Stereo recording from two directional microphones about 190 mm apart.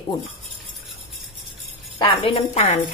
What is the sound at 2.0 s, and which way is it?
Speech, 30° left (ahead or behind).